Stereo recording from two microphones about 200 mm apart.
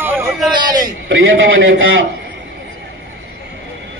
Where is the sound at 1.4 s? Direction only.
80° right.